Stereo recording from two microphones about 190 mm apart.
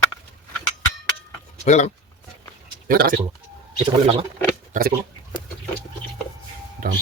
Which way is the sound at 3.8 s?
30° right (ahead or behind).